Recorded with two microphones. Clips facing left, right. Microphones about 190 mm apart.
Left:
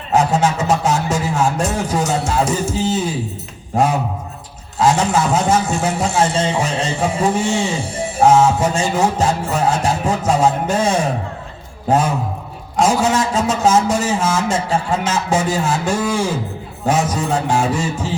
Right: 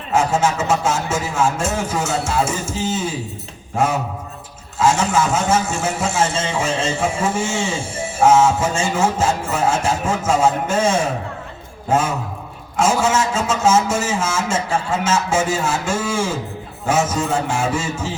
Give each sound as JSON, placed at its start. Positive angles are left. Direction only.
{"t": 0.1, "sound": "a man's voice", "side_deg": 35}
{"t": 4.8, "sound": "a man's voice", "side_deg": 35}
{"t": 12.7, "sound": "a man's voice", "side_deg": 35}